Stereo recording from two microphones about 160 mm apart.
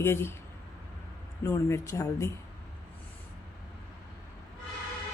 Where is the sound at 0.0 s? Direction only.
15° left (ahead or behind).